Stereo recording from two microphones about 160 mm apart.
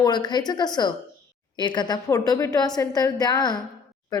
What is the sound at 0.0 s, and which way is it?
A woman's voice, 25° left (ahead or behind).